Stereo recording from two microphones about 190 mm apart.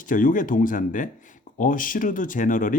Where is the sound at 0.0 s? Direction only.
45° left (ahead or behind).